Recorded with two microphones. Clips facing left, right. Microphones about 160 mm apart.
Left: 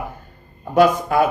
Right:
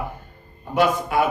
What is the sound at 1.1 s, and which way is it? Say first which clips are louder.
Speech: left 3 dB; 45° left (ahead or behind).